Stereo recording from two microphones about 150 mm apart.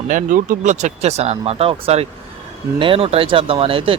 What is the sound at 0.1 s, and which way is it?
Speech, 60° right (ahead or behind).